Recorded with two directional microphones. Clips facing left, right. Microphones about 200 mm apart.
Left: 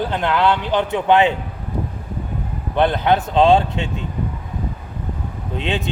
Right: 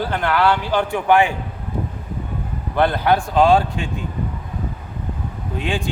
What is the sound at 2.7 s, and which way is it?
Speech, 20° left (ahead or behind).